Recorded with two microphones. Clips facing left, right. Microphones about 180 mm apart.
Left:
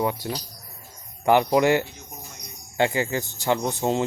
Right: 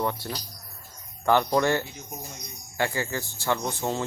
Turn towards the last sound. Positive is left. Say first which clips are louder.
# left 5 dB
turn(degrees=20)  # may be behind; listen again after turning